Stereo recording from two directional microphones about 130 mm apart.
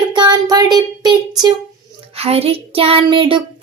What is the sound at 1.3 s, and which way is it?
Speech, 30° right (ahead or behind).